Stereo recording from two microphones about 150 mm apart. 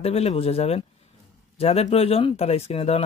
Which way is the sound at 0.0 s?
45° left (ahead or behind).